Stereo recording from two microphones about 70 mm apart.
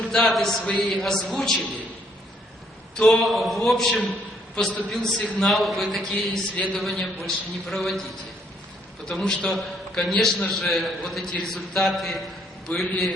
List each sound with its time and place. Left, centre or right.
0.0 s a man's voice: centre
3.0 s a man's voice: centre
9.1 s a man's voice: centre
10.4 s a man's voice: centre
10.7 s a man's voice: centre